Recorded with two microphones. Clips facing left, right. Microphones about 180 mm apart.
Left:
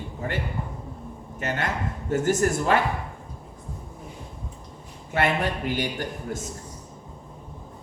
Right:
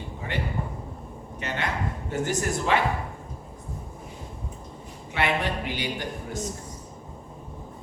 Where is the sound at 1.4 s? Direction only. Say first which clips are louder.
Left 2 dB; 45° left (ahead or behind).